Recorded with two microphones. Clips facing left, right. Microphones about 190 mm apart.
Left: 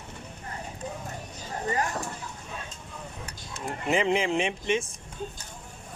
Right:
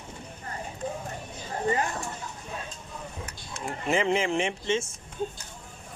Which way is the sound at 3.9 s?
15° left (ahead or behind).